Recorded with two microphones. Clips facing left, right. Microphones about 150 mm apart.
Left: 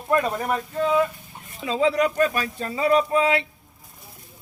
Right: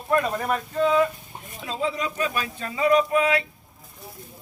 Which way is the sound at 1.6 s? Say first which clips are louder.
Left 7 dB; 90° left.